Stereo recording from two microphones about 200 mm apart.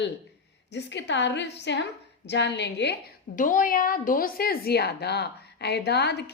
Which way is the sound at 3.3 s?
40° left (ahead or behind).